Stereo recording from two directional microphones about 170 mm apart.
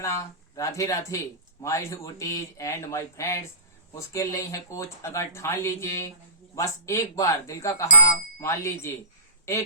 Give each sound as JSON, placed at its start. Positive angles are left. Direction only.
{"t": 0.0, "sound": "speech", "side_deg": 15}